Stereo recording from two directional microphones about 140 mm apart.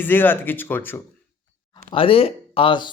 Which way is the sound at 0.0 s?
15° left (ahead or behind).